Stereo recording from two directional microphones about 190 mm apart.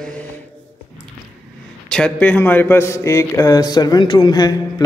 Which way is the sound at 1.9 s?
5° left (ahead or behind).